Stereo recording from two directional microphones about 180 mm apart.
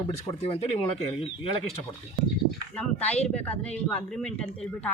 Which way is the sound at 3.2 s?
5° left (ahead or behind).